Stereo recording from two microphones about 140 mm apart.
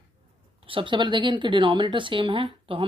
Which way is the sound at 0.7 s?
35° right (ahead or behind).